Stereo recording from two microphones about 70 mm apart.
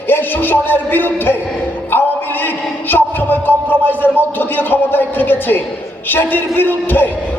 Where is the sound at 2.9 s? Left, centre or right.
Left.